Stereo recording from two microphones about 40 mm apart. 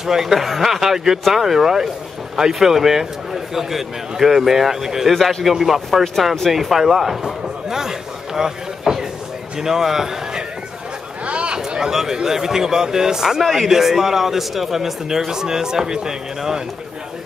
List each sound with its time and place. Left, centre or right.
0.0 s a man's voice: centre
5.1 s speech: centre
5.4 s a man's voice: centre
11.2 s a sound: right
11.9 s a man's voice: centre